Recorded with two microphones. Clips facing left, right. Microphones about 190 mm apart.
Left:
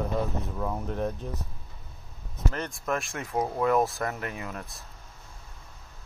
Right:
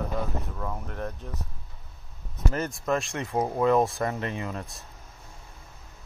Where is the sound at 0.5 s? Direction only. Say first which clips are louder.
Left 4 dB; 10° left (ahead or behind).